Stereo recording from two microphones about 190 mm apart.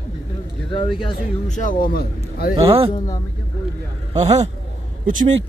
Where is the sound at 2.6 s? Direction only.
30° right (ahead or behind).